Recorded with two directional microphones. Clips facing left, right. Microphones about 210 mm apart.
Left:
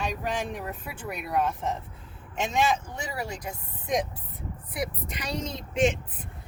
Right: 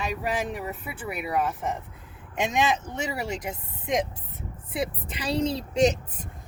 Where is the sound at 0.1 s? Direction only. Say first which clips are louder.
Right 2 dB; 5° right (ahead or behind).